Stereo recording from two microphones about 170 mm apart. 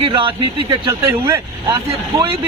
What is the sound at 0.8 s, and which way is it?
Speech, 15° right (ahead or behind).